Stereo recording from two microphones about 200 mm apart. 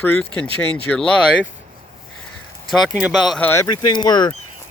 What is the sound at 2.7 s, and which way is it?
Speech, centre (ahead or behind).